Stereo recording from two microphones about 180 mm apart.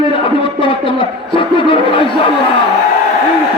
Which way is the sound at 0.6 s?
30° left (ahead or behind).